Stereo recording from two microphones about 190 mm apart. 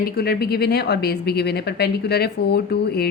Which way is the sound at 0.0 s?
55° left (ahead or behind).